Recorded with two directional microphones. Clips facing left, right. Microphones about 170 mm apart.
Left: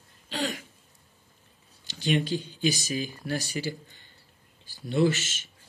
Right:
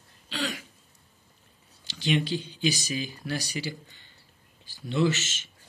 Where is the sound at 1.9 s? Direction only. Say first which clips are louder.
Even; 45° left (ahead or behind).